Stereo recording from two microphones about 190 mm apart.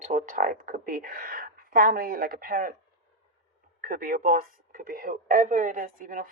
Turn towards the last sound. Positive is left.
turn(degrees=-45)  # may be behind; listen again after turning